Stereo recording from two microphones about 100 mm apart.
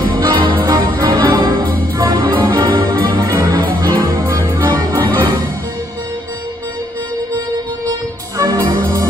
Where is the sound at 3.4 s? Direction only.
45° right (ahead or behind).